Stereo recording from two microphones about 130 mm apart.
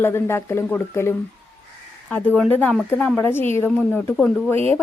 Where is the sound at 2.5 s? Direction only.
15° left (ahead or behind).